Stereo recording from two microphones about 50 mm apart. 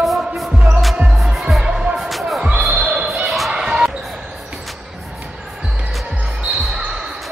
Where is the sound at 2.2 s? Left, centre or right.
Centre.